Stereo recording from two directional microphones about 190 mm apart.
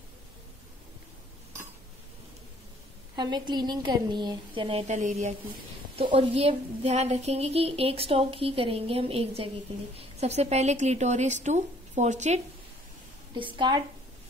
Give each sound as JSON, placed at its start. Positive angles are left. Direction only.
{"t": 3.2, "sound": "a woman's voice", "side_deg": -25}
{"t": 13.3, "sound": "a woman's voice", "side_deg": -25}